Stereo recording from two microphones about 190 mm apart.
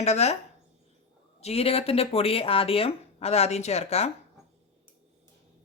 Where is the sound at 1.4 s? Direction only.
35° left (ahead or behind).